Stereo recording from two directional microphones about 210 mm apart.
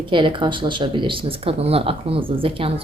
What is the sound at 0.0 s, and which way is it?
Speech, 25° right (ahead or behind).